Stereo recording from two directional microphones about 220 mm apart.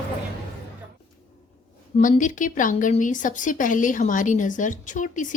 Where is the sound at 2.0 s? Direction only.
35° left (ahead or behind).